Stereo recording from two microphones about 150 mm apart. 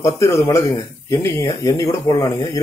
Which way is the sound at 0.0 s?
20° left (ahead or behind).